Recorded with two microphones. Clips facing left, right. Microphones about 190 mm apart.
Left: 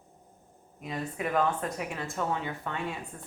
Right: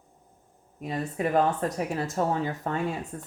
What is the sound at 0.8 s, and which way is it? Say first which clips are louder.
Speech: right 5 dB; 35° right (ahead or behind).